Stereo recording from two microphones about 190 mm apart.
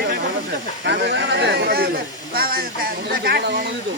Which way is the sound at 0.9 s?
60° right (ahead or behind).